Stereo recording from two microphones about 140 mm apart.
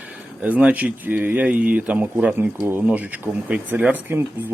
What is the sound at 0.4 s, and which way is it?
Speech, 10° right (ahead or behind).